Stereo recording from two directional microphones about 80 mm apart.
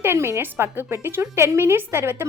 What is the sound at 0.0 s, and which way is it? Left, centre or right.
A woman's voice, right.